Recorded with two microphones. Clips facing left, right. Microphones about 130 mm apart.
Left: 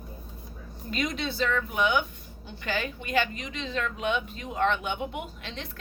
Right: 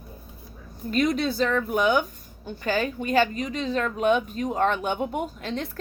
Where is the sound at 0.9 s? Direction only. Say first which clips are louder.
Right 7 dB; 45° right (ahead or behind).